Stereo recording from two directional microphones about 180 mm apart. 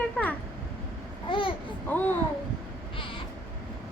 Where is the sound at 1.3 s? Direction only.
30° left (ahead or behind).